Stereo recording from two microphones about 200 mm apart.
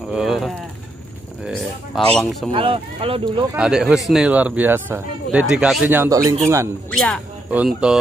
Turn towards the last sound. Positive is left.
turn(degrees=-5)  # may be behind; listen again after turning